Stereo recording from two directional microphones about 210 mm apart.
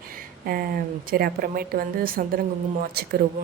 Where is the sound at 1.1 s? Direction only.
45° right (ahead or behind).